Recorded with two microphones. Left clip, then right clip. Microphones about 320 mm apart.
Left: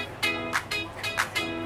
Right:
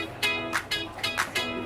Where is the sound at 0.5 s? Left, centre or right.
Centre.